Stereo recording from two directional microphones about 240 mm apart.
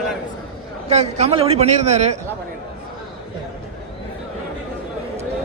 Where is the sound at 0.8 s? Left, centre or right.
Right.